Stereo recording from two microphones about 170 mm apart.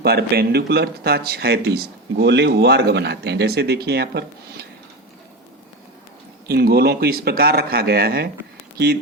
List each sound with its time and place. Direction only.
0.0 s speech: 65° right (ahead or behind)
6.5 s speech: 70° right (ahead or behind)